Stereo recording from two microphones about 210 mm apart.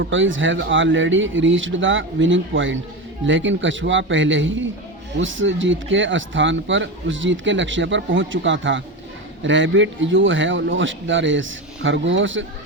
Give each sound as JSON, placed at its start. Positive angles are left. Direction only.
{"t": 0.0, "sound": "speech", "side_deg": -65}